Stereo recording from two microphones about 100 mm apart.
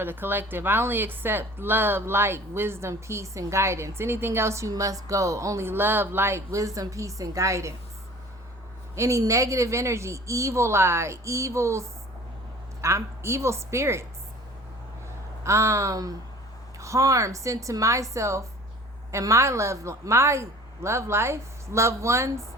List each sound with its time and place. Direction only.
0.0 s a woman's voice: 20° right (ahead or behind)
9.0 s a woman's voice: 35° right (ahead or behind)
15.4 s a woman's voice: 30° right (ahead or behind)